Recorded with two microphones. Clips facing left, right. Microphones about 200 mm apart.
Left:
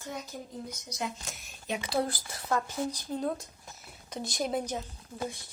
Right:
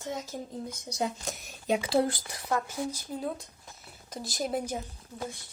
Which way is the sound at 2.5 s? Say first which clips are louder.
Even; 10° right (ahead or behind).